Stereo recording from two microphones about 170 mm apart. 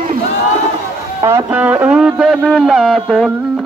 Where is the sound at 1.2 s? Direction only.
20° right (ahead or behind); by 3.3 s centre (ahead or behind).